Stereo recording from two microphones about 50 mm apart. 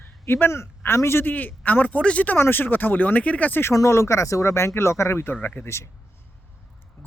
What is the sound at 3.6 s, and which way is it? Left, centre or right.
Speech, left.